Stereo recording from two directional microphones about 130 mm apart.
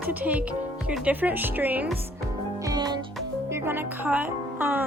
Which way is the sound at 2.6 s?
30° right (ahead or behind).